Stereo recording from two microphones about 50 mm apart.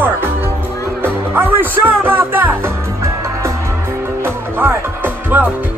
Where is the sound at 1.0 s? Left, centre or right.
Right.